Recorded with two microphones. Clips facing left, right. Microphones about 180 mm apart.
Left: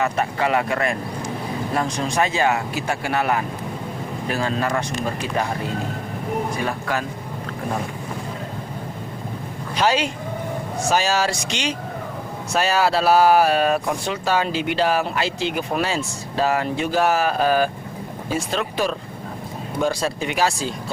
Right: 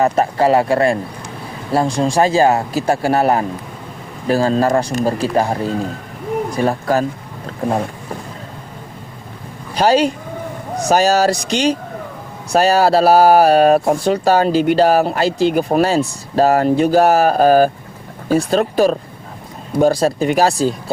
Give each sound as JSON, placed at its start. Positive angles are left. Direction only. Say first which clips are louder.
{"t": 0.0, "sound": "speech", "louder": "right 7 dB", "side_deg": -35}
{"t": 9.7, "sound": "speech", "louder": "right 7 dB", "side_deg": -35}